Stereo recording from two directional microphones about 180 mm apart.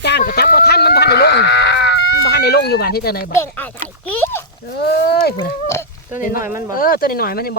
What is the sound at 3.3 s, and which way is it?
Speech, 15° left (ahead or behind).